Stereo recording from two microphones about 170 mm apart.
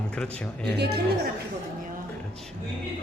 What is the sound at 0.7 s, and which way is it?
Speech, 75° right (ahead or behind).